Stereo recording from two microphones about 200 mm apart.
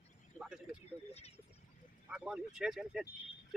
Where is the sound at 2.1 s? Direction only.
5° right (ahead or behind).